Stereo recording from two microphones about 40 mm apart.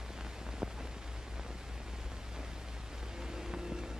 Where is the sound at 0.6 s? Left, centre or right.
Centre.